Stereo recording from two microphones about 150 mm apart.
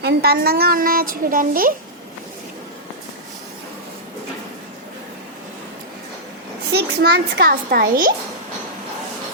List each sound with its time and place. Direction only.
0.0 s a woman's voice: 90° right; by 1.7 s 70° right (ahead or behind)
6.7 s a child's voice: 90° right; by 8.1 s 75° right (ahead or behind)